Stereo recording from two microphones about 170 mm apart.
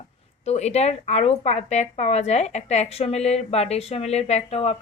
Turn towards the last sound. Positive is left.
turn(degrees=35)  # may be behind; listen again after turning